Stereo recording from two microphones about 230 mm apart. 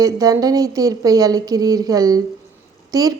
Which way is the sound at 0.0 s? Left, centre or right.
Centre.